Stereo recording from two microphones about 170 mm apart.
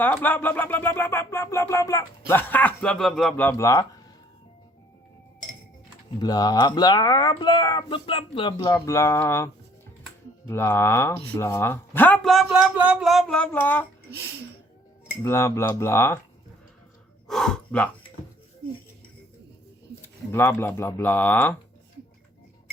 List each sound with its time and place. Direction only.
0.0 s speech: 10° left (ahead or behind)
6.1 s a man's voice: 20° left (ahead or behind)
15.2 s speech: 15° left (ahead or behind)
17.2 s speech: 5° left (ahead or behind)
20.0 s speech: 10° left (ahead or behind)